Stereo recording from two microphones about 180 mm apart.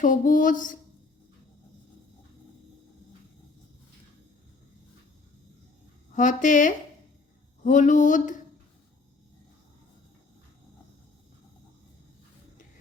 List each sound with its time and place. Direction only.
0.0 s speech: 45° left (ahead or behind)
6.1 s speech: 45° left (ahead or behind)